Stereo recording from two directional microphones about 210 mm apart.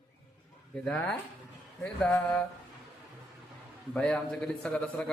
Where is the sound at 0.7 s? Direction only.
5° left (ahead or behind).